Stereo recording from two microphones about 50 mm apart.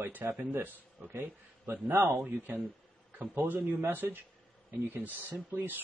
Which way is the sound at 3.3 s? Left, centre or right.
Right.